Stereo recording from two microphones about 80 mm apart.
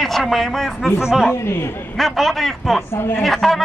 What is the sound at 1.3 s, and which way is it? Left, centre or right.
Speech, left.